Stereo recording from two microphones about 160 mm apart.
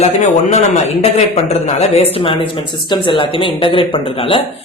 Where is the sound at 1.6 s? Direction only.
40° left (ahead or behind).